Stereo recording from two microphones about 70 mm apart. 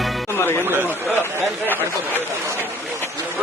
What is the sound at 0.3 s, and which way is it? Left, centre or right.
Speech, left.